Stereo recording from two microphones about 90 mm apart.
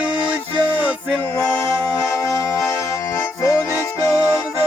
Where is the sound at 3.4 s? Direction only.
30° left (ahead or behind).